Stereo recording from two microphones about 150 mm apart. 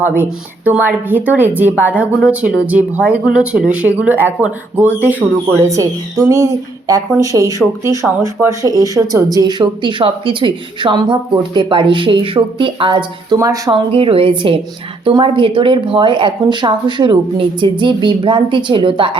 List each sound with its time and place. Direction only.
0.0 s speech: 10° right (ahead or behind)
5.5 s speech: 20° right (ahead or behind)